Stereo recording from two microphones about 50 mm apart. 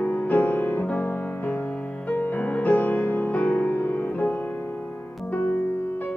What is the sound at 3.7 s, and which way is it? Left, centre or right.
Music, left.